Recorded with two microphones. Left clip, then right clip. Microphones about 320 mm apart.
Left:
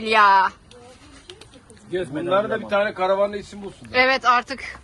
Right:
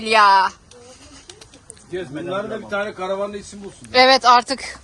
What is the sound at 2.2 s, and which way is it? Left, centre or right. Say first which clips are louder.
Speech: left 6 dB; left.